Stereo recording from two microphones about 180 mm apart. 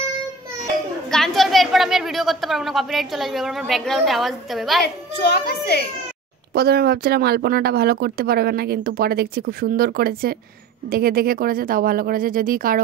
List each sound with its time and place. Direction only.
1.1 s a woman's voice: centre (ahead or behind)
4.8 s a child's voice: 65° left (ahead or behind)
6.5 s speech: 60° right (ahead or behind)